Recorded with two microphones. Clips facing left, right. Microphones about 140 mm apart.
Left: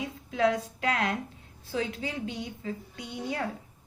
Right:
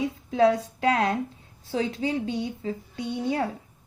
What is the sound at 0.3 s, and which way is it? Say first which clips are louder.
A woman's voice: right 5 dB; 30° right (ahead or behind).